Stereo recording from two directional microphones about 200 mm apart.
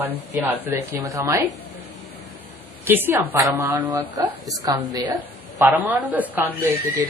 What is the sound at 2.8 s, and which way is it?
A woman's voice, 10° right (ahead or behind).